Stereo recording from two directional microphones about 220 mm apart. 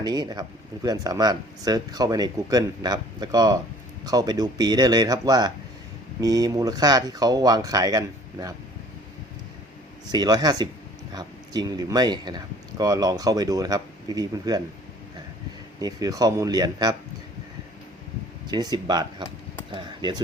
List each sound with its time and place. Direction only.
0.0 s speech: 20° right (ahead or behind)
10.1 s speech: 20° right (ahead or behind)
15.8 s speech: 15° right (ahead or behind)
18.4 s speech: 20° right (ahead or behind)